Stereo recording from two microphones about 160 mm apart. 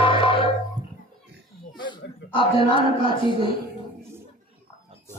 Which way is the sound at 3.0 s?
35° left (ahead or behind).